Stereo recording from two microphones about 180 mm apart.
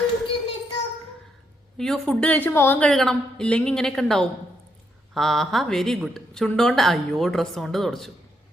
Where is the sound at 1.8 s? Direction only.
5° left (ahead or behind).